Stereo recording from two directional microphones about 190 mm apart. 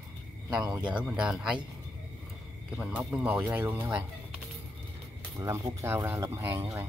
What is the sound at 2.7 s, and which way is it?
Speech, 5° right (ahead or behind).